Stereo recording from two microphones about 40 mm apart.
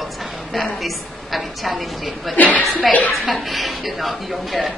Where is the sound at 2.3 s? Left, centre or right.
Left.